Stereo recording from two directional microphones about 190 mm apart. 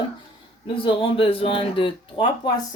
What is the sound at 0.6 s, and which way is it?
Speech, 25° left (ahead or behind).